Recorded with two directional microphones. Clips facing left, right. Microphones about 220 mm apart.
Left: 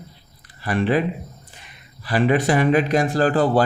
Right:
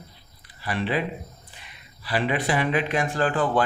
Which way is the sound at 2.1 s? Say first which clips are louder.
Left 6 dB; 45° left (ahead or behind).